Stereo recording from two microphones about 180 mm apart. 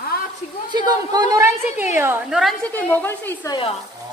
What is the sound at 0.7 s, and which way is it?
A woman's voice, 20° right (ahead or behind).